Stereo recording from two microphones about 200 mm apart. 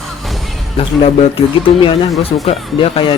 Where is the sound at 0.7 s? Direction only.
30° left (ahead or behind).